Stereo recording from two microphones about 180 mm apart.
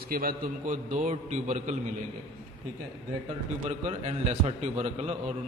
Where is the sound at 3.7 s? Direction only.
40° right (ahead or behind).